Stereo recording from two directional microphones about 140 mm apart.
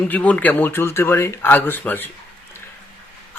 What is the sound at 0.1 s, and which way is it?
A man's voice, 10° left (ahead or behind).